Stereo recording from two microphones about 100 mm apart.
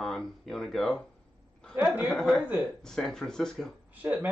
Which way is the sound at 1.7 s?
20° right (ahead or behind).